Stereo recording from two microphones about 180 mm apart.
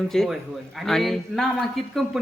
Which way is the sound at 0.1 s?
Centre (ahead or behind).